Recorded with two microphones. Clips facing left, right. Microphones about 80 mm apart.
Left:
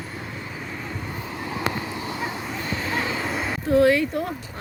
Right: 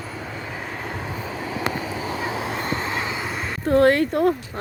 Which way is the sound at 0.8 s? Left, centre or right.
Right.